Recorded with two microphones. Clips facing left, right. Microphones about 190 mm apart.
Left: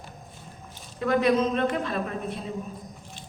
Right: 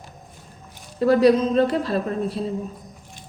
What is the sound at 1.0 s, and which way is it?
A woman's voice, 35° right (ahead or behind).